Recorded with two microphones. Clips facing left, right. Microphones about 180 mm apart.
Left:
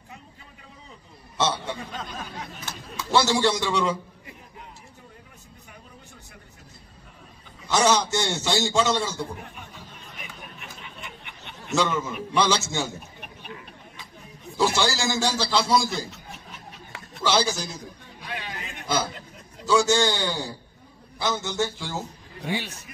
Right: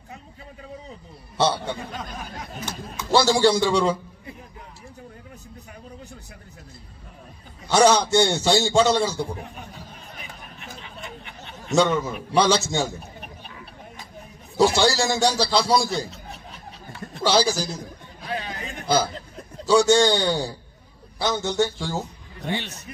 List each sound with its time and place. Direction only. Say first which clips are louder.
1.4 s a man's voice: right 4 dB; 35° right (ahead or behind)
3.1 s a man's voice: right 4 dB; 35° right (ahead or behind)
7.6 s a man's voice: right 4 dB; 35° right (ahead or behind)
10.2 s a sound: right 1 dB; 35° right (ahead or behind)
12.4 s a man's voice: right 4 dB; 35° right (ahead or behind)
14.6 s a man's voice: right 5 dB; 35° right (ahead or behind)
17.2 s a man's voice: right 3 dB; 35° right (ahead or behind)
19.6 s a man's voice: right 4 dB; 35° right (ahead or behind)
22.4 s a man's voice: right 1 dB; 10° left (ahead or behind)